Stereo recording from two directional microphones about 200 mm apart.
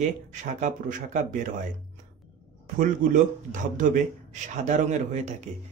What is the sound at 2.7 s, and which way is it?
Speech, 40° right (ahead or behind).